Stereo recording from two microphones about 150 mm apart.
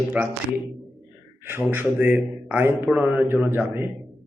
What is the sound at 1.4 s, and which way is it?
A man's voice, 15° right (ahead or behind).